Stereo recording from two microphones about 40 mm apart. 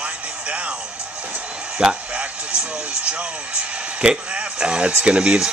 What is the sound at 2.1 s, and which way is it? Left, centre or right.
Vehicle, right.